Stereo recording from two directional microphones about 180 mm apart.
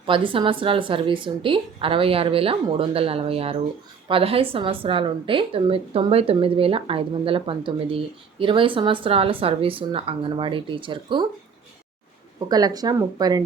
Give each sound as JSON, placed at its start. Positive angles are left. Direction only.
{"t": 0.0, "sound": "a woman's voice", "side_deg": -30}
{"t": 12.5, "sound": "a woman's voice", "side_deg": -20}